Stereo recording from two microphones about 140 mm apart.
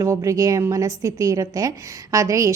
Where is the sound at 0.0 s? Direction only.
20° right (ahead or behind).